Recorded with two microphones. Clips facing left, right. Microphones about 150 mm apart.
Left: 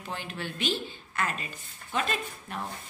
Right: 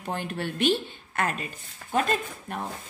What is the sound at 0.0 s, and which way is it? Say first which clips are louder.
Speech: right 6 dB; 55° right (ahead or behind).